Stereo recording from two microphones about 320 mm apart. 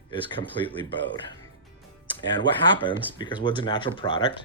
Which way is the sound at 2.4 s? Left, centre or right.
Centre.